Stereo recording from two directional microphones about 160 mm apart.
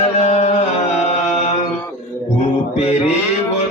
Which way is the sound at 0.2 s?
45° left (ahead or behind).